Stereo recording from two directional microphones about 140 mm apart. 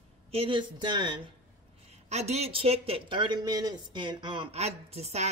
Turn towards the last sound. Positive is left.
turn(degrees=-50)  # may be behind; listen again after turning